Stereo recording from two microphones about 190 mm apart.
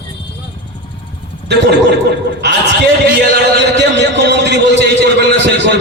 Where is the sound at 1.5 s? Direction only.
65° right (ahead or behind).